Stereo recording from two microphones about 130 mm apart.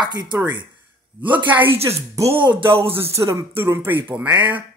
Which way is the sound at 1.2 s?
10° right (ahead or behind).